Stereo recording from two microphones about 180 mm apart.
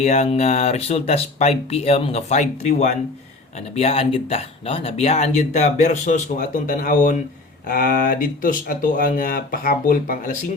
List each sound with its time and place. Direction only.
0.0 s speech: 40° left (ahead or behind)